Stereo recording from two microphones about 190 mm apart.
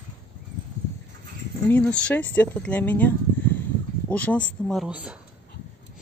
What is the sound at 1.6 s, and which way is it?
Speech, 10° left (ahead or behind).